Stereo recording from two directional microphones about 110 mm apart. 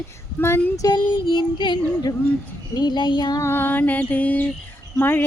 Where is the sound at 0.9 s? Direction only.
45° left (ahead or behind).